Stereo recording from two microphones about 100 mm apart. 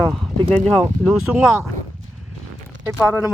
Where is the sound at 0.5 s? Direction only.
10° left (ahead or behind).